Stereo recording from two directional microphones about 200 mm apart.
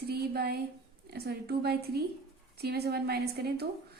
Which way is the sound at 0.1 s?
50° right (ahead or behind).